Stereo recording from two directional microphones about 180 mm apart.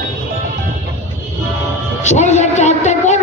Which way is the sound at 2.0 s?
40° left (ahead or behind).